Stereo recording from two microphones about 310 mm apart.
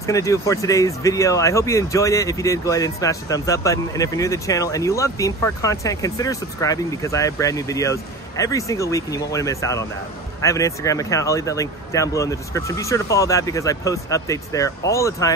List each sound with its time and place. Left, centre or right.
0.0 s speech: centre